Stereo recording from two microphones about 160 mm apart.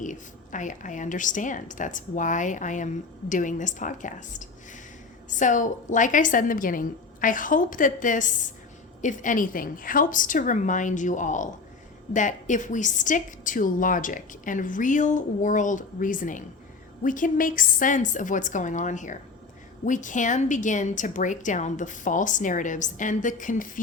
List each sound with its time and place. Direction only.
0.0 s a woman's voice: 50° left (ahead or behind)